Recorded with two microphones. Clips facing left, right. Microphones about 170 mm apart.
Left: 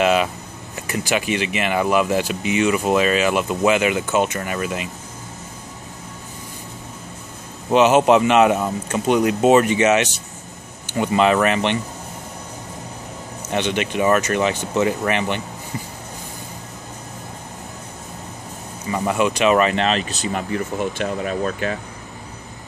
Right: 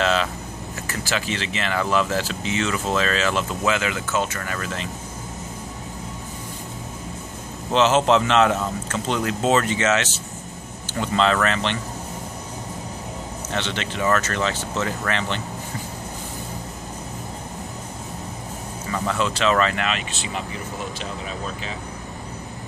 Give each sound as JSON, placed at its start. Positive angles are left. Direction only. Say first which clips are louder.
{"t": 0.0, "sound": "speech", "louder": "left 4 dB", "side_deg": 15}
{"t": 7.7, "sound": "speech", "louder": "left 4 dB", "side_deg": 15}
{"t": 13.5, "sound": "speech", "louder": "left 7 dB", "side_deg": 15}
{"t": 18.9, "sound": "speech", "louder": "left 5 dB", "side_deg": 15}
{"t": 19.8, "sound": "speech", "louder": "left 6 dB", "side_deg": 35}
{"t": 20.5, "sound": "speech", "louder": "left 8 dB", "side_deg": 60}